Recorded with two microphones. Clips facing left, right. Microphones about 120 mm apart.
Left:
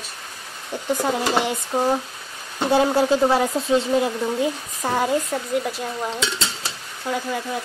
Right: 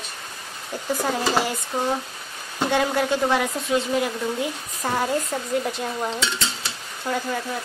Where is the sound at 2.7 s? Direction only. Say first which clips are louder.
Left 5 dB; 30° left (ahead or behind).